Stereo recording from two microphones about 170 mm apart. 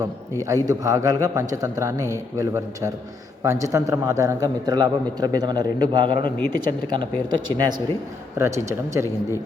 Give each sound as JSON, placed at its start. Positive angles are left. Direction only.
{"t": 0.4, "sound": "a man's voice", "side_deg": -20}